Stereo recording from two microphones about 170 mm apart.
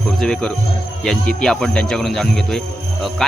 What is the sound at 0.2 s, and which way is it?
Speech, 5° left (ahead or behind).